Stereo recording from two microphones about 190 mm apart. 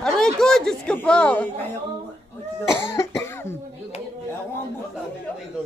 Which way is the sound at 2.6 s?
15° left (ahead or behind).